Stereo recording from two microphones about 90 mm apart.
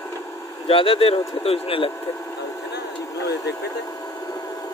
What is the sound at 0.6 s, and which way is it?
Speech, 90° left.